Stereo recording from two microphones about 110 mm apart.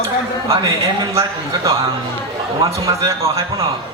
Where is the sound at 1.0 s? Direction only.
30° right (ahead or behind).